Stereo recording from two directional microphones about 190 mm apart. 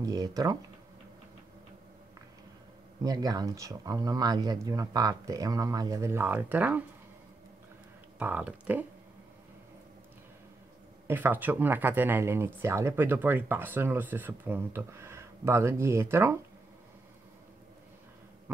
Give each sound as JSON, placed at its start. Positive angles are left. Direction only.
{"t": 0.0, "sound": "speech", "side_deg": -20}
{"t": 3.0, "sound": "speech", "side_deg": -20}
{"t": 8.2, "sound": "speech", "side_deg": -10}
{"t": 11.1, "sound": "speech", "side_deg": -10}